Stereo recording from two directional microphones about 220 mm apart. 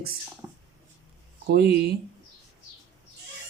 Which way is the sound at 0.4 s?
15° right (ahead or behind).